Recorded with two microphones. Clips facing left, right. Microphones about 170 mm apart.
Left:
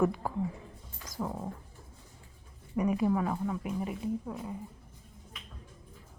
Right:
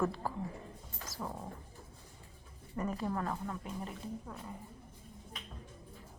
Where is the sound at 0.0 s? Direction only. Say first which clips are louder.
Left 5 dB; 15° left (ahead or behind).